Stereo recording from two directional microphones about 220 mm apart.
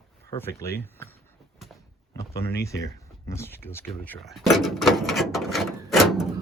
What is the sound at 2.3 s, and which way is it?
Speech, 10° left (ahead or behind).